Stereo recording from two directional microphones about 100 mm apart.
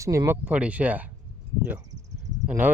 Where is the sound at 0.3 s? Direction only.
15° right (ahead or behind).